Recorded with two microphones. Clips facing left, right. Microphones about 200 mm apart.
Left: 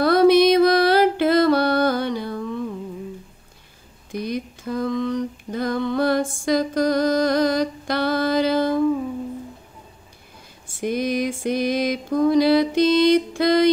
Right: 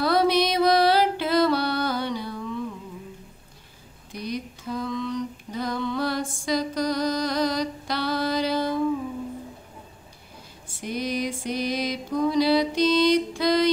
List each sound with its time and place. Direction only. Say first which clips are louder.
0.0 s music: left 7 dB; 50° left (ahead or behind)
4.2 s female singing: left 4 dB; 50° left (ahead or behind)
10.8 s a sound: left 6 dB; 55° left (ahead or behind)